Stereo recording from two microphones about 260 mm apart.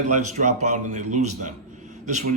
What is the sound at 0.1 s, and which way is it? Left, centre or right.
Speech, right.